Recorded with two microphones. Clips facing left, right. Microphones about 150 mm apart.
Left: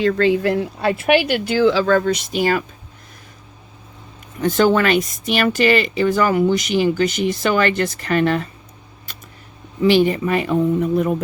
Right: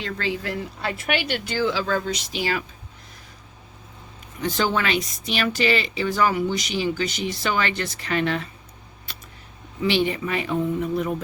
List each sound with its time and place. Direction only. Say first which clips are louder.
0.0 s speech: left 12 dB; 60° left (ahead or behind)
4.4 s speech: left 8 dB; 50° left (ahead or behind)
9.8 s speech: left 7 dB; 45° left (ahead or behind)